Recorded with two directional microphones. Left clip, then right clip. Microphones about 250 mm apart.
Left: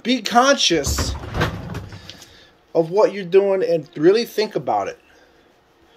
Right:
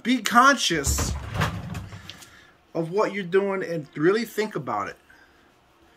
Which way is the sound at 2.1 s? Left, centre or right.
Centre.